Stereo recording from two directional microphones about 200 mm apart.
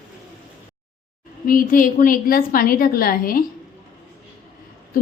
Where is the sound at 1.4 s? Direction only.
45° left (ahead or behind).